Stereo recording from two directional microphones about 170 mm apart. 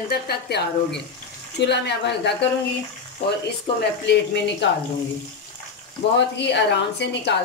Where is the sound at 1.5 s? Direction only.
90° left.